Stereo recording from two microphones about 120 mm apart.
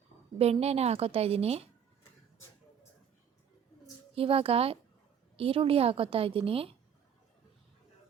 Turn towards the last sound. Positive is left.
turn(degrees=-50)  # may be behind; listen again after turning